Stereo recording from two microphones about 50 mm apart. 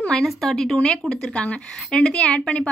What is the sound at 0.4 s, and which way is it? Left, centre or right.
A woman's voice, centre.